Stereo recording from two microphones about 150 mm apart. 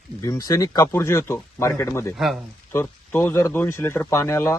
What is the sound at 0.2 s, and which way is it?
Speech, 20° left (ahead or behind).